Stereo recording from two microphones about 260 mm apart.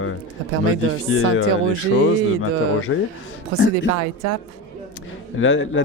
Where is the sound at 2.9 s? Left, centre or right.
Left.